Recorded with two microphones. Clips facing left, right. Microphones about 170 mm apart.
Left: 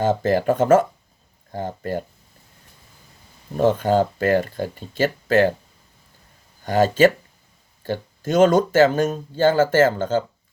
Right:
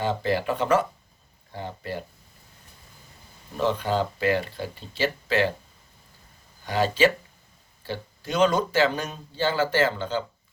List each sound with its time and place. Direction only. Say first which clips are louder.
0.0 s speech: left 6 dB; 45° left (ahead or behind)
3.6 s speech: left 7 dB; 45° left (ahead or behind)
6.7 s speech: left 6 dB; 45° left (ahead or behind)